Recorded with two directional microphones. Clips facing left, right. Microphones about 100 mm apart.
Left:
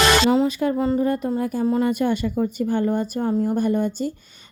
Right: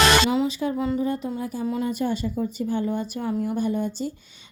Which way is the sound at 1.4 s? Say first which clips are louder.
Left 6 dB; 55° left (ahead or behind).